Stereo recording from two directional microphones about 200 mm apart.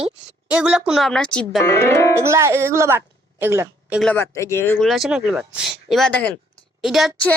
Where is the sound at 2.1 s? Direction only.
15° right (ahead or behind).